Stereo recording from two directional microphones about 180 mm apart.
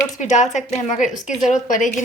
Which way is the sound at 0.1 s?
40° left (ahead or behind).